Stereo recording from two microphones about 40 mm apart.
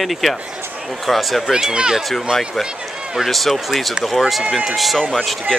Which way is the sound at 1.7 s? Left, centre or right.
Centre.